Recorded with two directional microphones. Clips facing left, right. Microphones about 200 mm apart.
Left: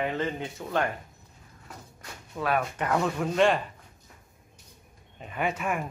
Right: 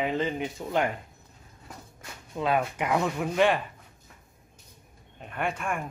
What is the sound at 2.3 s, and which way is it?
Speech, 20° right (ahead or behind).